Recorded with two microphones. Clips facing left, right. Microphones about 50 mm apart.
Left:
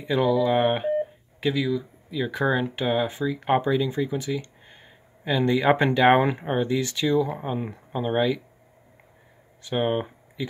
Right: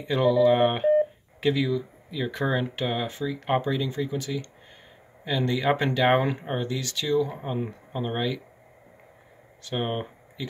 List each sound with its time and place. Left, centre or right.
0.0 s speech: centre
9.8 s speech: centre